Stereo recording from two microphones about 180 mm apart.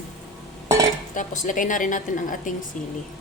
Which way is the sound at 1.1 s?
45° left (ahead or behind).